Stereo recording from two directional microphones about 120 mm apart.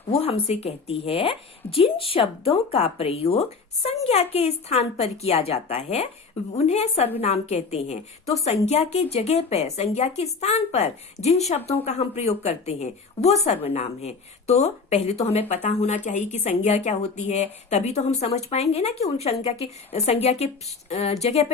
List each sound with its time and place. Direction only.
0.1 s a woman's voice: 55° left (ahead or behind)